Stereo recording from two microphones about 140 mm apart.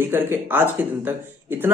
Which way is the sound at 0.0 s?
15° right (ahead or behind).